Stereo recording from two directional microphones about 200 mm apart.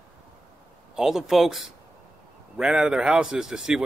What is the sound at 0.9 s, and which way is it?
Speech, centre (ahead or behind).